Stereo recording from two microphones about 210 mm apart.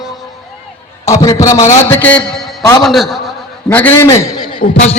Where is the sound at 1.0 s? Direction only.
15° left (ahead or behind).